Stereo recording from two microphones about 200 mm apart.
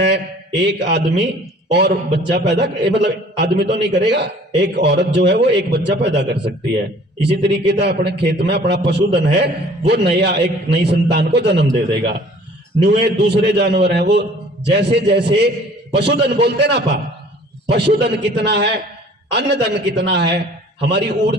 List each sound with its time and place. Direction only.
0.6 s a man's voice: 55° right (ahead or behind)